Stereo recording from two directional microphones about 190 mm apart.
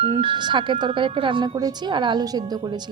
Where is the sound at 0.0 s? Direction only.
25° right (ahead or behind).